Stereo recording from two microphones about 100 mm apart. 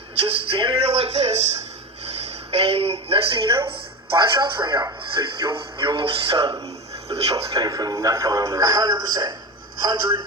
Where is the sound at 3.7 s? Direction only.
55° right (ahead or behind).